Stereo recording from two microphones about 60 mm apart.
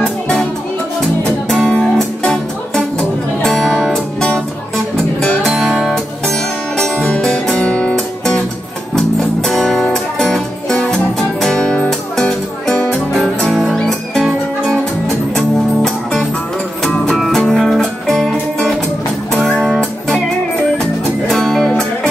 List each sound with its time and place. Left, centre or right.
0.0 s music: centre
3.9 s music: centre
5.5 s music: centre
6.2 s music: centre